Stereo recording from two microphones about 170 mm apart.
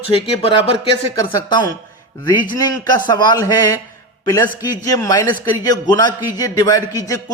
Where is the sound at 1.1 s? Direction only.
20° left (ahead or behind).